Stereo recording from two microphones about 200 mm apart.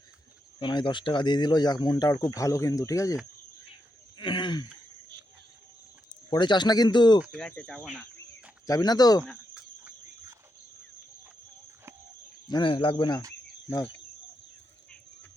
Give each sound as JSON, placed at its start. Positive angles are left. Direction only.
{"t": 0.6, "sound": "speech", "side_deg": 20}
{"t": 4.2, "sound": "speech", "side_deg": 25}
{"t": 6.3, "sound": "speech", "side_deg": 20}
{"t": 7.2, "sound": "speech", "side_deg": 5}
{"t": 9.2, "sound": "chicken", "side_deg": 5}
{"t": 12.5, "sound": "speech", "side_deg": 25}